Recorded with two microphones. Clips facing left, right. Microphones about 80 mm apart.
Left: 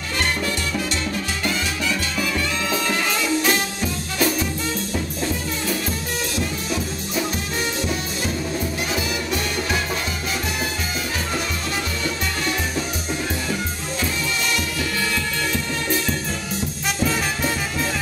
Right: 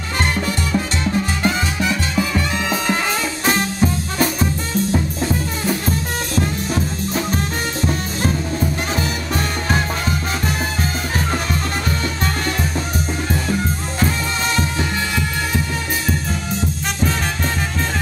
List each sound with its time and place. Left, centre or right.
1.4 s music: right
5.7 s music: right
8.9 s music: right